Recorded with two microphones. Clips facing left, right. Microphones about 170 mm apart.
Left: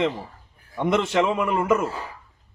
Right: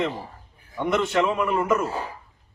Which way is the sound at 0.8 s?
25° left (ahead or behind).